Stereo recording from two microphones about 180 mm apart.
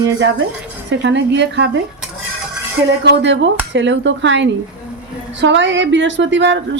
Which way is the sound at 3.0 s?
75° right (ahead or behind).